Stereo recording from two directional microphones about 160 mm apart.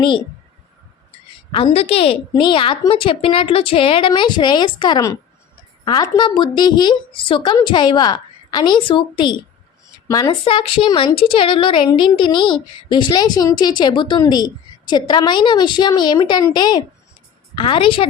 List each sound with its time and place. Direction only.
1.5 s a woman's voice: 40° left (ahead or behind)
10.4 s a woman's voice: 35° left (ahead or behind)